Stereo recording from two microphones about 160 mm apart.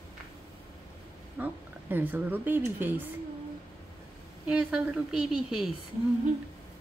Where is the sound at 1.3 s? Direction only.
10° right (ahead or behind).